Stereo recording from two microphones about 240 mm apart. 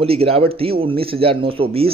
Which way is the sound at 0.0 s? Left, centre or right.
Right.